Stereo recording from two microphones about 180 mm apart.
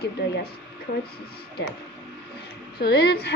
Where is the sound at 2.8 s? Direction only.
65° left (ahead or behind).